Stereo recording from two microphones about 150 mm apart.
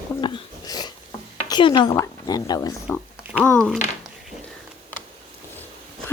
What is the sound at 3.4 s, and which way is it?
Speech, 5° left (ahead or behind).